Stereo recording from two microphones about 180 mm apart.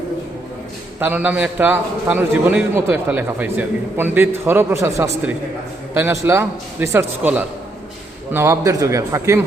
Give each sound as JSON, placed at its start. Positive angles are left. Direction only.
{"t": 0.9, "sound": "a man's voice", "side_deg": -10}